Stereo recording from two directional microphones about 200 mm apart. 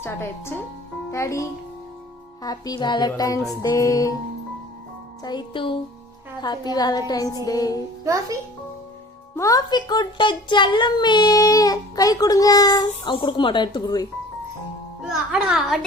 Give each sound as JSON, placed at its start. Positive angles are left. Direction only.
{"t": 0.0, "sound": "a child's voice", "side_deg": 10}
{"t": 5.2, "sound": "a child's voice", "side_deg": 20}
{"t": 8.0, "sound": "a child's voice", "side_deg": -15}
{"t": 9.3, "sound": "a child's voice", "side_deg": 15}
{"t": 15.0, "sound": "a child's voice", "side_deg": 0}